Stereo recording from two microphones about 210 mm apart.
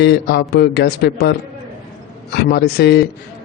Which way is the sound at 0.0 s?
50° left (ahead or behind).